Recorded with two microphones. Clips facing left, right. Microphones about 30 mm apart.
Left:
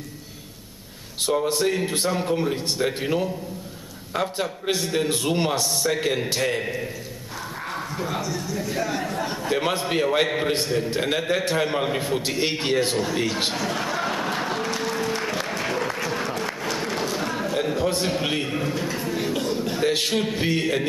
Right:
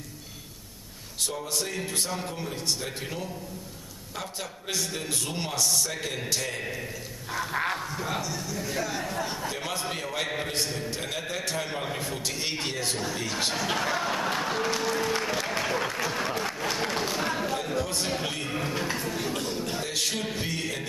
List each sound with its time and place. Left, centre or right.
1.2 s a man's voice: left
6.6 s a man's voice: centre
7.9 s a man's voice: centre
9.6 s a man's voice: left
11.0 s a man's voice: left
13.7 s music: centre
15.9 s applause: centre
16.9 s a sound: centre
17.6 s a sound: left
18.5 s a sound: centre
18.9 s cough: centre
19.8 s a man's voice: left